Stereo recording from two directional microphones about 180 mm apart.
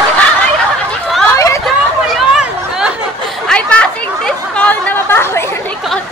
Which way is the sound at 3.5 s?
5° left (ahead or behind).